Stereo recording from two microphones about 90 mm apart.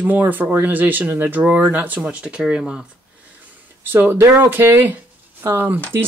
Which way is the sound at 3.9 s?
25° right (ahead or behind).